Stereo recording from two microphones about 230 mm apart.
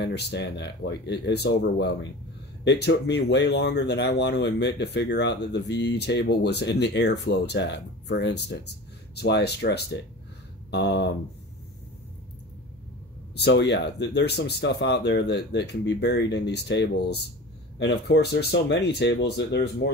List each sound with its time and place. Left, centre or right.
0.0 s speech: left
13.4 s speech: left